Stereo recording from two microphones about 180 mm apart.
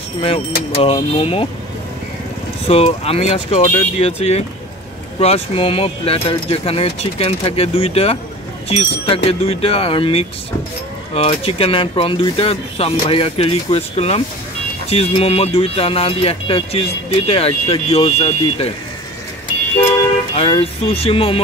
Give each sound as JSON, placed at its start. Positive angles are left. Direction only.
{"t": 0.2, "sound": "speech", "side_deg": 30}
{"t": 2.7, "sound": "speech", "side_deg": 35}
{"t": 20.3, "sound": "speech", "side_deg": 35}